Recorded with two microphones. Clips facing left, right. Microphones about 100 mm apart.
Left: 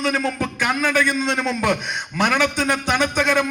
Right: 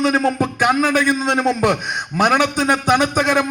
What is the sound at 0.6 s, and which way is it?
A man's voice, 45° right (ahead or behind).